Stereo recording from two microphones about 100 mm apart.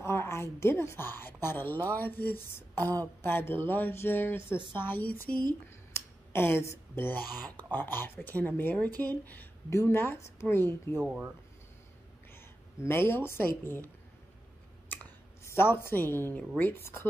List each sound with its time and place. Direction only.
0.0 s a woman's voice: 25° left (ahead or behind)
5.9 s a sound: 25° left (ahead or behind)
7.5 s a woman's voice: 20° left (ahead or behind)
12.4 s speech: 25° left (ahead or behind)
15.4 s a woman's voice: 20° left (ahead or behind)